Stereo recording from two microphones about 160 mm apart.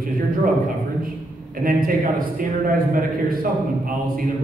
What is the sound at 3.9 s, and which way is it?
Speech, 60° right (ahead or behind).